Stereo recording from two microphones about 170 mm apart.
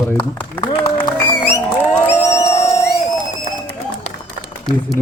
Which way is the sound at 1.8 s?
10° left (ahead or behind).